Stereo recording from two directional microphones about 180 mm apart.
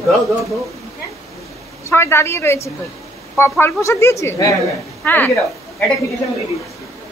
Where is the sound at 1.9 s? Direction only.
15° left (ahead or behind).